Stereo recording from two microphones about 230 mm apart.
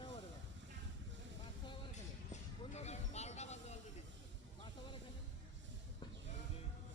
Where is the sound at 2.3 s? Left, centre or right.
Left.